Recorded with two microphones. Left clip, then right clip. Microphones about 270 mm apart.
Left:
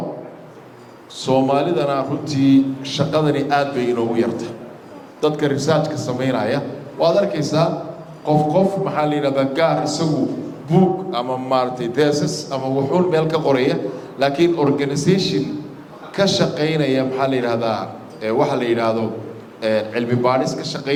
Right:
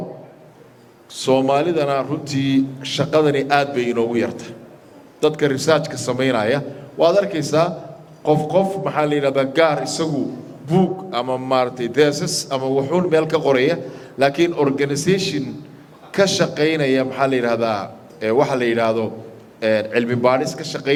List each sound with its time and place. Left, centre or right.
1.2 s a man's voice: right